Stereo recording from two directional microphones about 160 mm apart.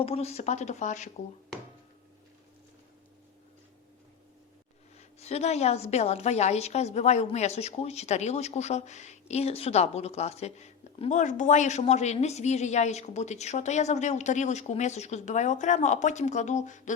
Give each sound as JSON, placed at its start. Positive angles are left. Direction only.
{"t": 0.0, "sound": "a woman's voice", "side_deg": 40}
{"t": 5.2, "sound": "a woman's voice", "side_deg": 40}